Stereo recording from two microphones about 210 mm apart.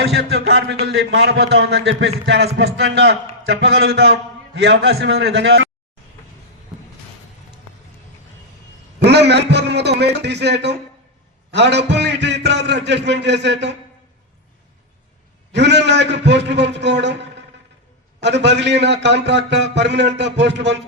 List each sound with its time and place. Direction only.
0.0 s a man's voice: 55° right (ahead or behind)
9.0 s a man's voice: 55° right (ahead or behind)
15.5 s a man's voice: 55° right (ahead or behind)